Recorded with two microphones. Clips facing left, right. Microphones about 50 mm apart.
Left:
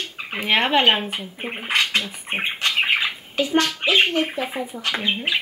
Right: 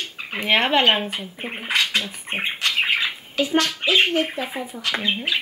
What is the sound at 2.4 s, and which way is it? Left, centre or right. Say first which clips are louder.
Bird: even; left.